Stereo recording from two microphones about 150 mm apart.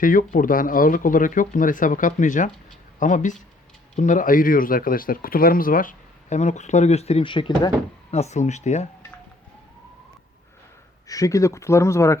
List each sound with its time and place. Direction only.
0.0 s speech: 65° left (ahead or behind); by 7.7 s 30° left (ahead or behind)
8.1 s speech: 45° left (ahead or behind)
11.1 s speech: 20° left (ahead or behind)